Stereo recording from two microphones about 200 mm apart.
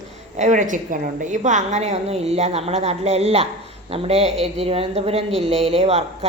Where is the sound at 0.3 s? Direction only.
35° right (ahead or behind).